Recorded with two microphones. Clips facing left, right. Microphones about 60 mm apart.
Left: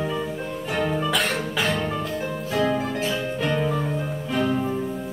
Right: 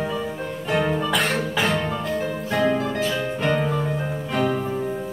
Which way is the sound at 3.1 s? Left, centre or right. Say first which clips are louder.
Right 2 dB; right.